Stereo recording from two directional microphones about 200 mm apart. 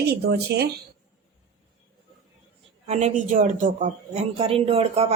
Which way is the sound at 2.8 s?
35° right (ahead or behind).